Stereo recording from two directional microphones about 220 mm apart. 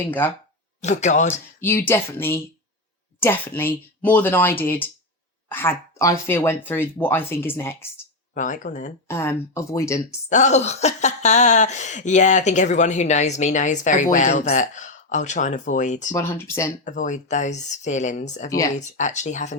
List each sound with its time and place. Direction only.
0.2 s speech: 10° left (ahead or behind)
0.8 s speech: 30° left (ahead or behind)
1.6 s speech: 10° left (ahead or behind)
8.4 s speech: 35° left (ahead or behind)
9.0 s speech: 10° left (ahead or behind)
10.2 s speech: 35° left (ahead or behind)
16.1 s speech: 10° left (ahead or behind)
16.8 s speech: 35° left (ahead or behind)
18.4 s speech: 15° left (ahead or behind)
18.9 s speech: 35° left (ahead or behind)